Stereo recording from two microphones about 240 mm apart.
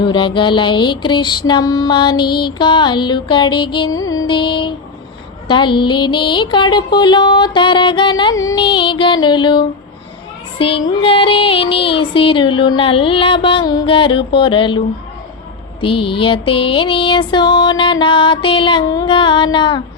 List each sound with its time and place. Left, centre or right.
0.0 s music: centre
15.8 s music: left